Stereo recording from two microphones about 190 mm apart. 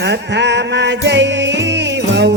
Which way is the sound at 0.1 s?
65° right (ahead or behind).